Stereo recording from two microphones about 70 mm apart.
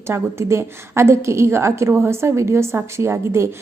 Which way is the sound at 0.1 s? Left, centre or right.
Right.